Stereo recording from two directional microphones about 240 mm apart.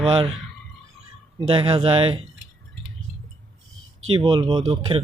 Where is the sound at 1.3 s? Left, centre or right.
Right.